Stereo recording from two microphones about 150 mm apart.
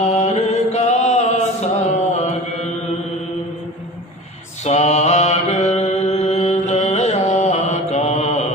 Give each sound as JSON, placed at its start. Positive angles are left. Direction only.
{"t": 0.1, "sound": "mantra", "side_deg": 45}
{"t": 4.6, "sound": "mantra", "side_deg": 50}